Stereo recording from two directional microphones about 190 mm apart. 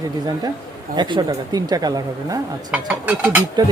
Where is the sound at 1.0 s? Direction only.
25° right (ahead or behind).